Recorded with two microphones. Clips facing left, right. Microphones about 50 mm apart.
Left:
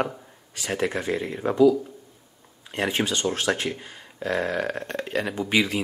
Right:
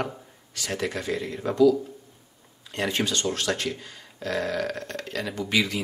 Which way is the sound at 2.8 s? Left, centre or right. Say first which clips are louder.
Left 2 dB; left.